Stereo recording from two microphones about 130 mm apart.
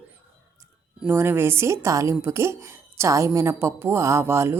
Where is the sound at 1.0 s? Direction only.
15° right (ahead or behind).